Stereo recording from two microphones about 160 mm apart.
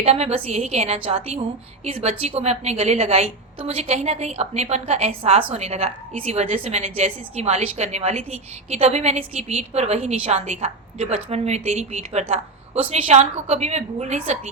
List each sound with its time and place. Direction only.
0.0 s a woman's voice: 40° right (ahead or behind)